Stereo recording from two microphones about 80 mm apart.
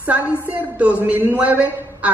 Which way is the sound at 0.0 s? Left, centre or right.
Centre.